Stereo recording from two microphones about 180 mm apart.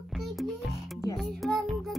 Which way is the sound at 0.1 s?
Centre (ahead or behind).